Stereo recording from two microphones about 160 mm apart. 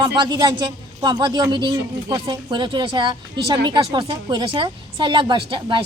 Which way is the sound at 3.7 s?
30° right (ahead or behind).